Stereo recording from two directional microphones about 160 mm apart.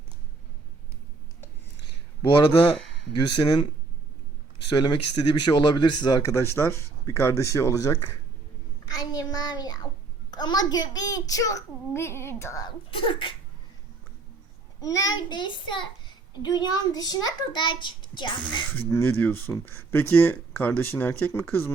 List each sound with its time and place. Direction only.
3.1 s a child's voice: 30° left (ahead or behind)
4.7 s a child's voice: 30° left (ahead or behind)
8.9 s child singing: 25° left (ahead or behind)
10.3 s a child's voice: 25° left (ahead or behind)
12.9 s speech: 30° left (ahead or behind)
14.8 s a child's voice: 20° left (ahead or behind)
18.7 s speech: 15° left (ahead or behind)